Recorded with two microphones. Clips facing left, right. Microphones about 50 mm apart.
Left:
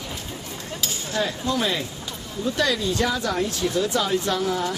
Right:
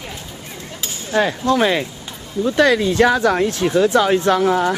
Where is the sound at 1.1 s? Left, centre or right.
Right.